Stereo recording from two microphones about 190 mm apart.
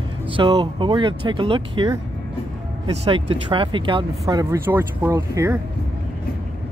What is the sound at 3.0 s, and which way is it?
Speech, 30° right (ahead or behind).